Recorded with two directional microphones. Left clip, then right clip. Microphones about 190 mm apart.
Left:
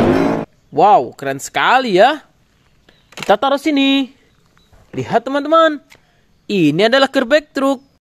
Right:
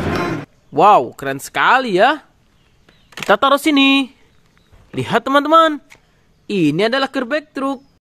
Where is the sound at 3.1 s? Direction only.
Centre (ahead or behind).